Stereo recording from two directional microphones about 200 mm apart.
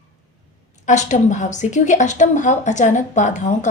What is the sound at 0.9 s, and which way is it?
A woman's voice, 35° left (ahead or behind).